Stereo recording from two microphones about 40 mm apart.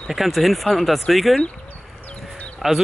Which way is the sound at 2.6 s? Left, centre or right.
Centre.